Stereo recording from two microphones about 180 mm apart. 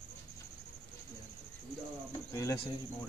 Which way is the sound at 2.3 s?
20° left (ahead or behind).